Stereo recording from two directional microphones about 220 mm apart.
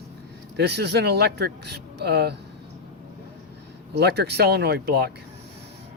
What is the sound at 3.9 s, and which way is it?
Speech, 50° right (ahead or behind).